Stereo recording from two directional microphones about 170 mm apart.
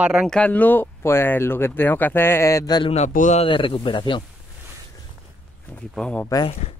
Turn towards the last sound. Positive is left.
turn(degrees=5)  # may be behind; listen again after turning